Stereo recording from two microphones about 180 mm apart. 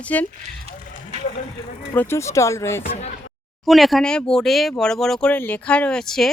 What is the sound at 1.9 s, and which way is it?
Speech, 15° left (ahead or behind).